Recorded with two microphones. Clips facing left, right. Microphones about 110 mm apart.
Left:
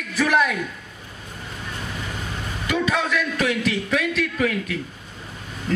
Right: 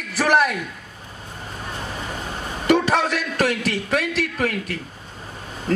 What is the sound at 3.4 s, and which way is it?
A man's voice, 45° right (ahead or behind).